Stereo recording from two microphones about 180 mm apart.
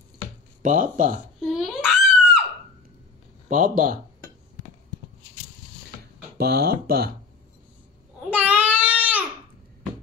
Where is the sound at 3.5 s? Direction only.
50° right (ahead or behind).